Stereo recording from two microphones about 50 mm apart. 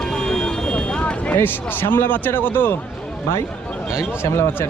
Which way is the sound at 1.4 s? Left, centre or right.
Left.